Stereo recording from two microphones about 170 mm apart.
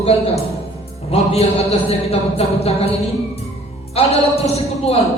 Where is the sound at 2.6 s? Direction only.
35° left (ahead or behind).